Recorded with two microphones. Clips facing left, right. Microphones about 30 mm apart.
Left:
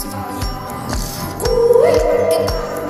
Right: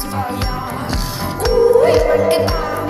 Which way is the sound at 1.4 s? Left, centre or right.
Right.